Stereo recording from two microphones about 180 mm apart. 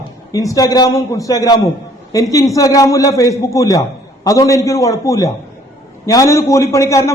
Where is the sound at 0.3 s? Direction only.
20° left (ahead or behind).